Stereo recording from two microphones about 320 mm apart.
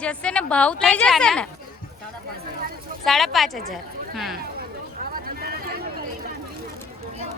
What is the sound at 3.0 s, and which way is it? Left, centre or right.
Speech, centre.